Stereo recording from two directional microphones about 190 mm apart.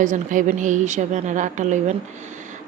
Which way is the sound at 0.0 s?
45° right (ahead or behind).